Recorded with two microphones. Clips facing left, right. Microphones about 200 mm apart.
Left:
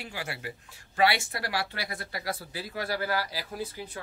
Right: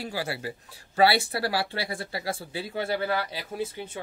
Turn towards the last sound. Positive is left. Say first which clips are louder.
# right 4 dB
turn(degrees=-25)  # may be behind; listen again after turning